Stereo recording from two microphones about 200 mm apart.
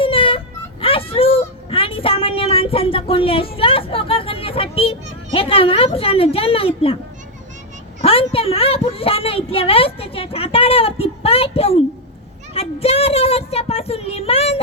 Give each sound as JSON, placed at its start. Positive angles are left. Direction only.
{"t": 0.0, "sound": "whimper", "side_deg": 25}
{"t": 8.0, "sound": "a woman's voice", "side_deg": 30}